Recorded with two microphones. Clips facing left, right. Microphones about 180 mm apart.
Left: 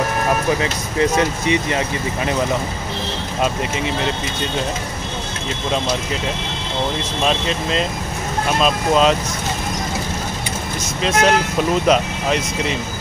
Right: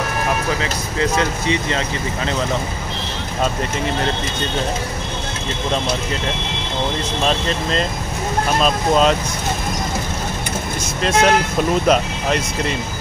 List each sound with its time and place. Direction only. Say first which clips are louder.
0.6 s speech: left 2 dB; 20° left (ahead or behind)
7.2 s speech: left 1 dB; 5° left (ahead or behind)
11.0 s speech: right 1 dB; centre (ahead or behind)